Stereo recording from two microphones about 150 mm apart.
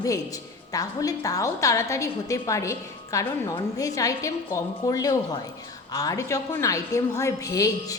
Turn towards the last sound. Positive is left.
turn(degrees=25)  # may be behind; listen again after turning